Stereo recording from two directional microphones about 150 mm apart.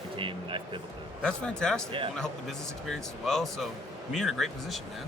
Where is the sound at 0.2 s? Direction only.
35° right (ahead or behind).